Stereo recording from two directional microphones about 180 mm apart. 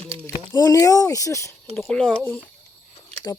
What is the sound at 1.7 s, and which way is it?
Speech, 5° left (ahead or behind).